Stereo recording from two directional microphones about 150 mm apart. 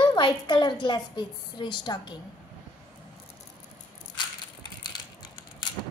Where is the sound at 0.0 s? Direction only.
30° left (ahead or behind).